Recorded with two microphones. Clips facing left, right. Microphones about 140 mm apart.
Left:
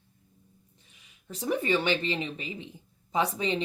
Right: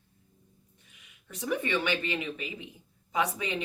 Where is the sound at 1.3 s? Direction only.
30° left (ahead or behind).